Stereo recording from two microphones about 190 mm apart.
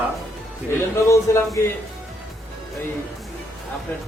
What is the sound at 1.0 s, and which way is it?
Speech, 15° left (ahead or behind).